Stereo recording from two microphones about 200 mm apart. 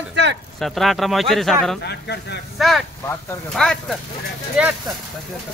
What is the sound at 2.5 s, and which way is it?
Speech, centre (ahead or behind).